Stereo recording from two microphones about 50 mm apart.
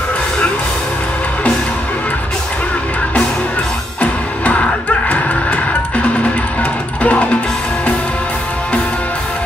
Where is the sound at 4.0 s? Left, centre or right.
Left.